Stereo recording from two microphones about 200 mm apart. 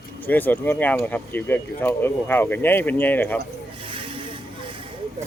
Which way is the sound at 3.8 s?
25° right (ahead or behind).